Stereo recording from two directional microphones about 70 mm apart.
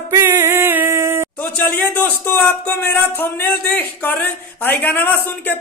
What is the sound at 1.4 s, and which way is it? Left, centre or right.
Speech, left.